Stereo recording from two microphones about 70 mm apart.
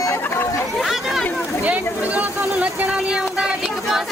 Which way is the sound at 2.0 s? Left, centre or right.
Right.